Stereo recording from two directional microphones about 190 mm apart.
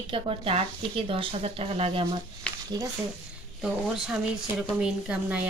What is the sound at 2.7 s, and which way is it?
Speech, 20° right (ahead or behind).